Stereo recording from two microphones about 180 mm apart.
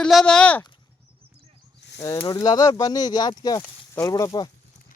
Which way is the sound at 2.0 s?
15° left (ahead or behind).